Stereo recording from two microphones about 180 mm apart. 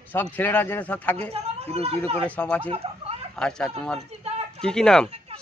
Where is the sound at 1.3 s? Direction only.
35° right (ahead or behind).